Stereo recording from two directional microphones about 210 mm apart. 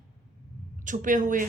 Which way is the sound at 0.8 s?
40° right (ahead or behind).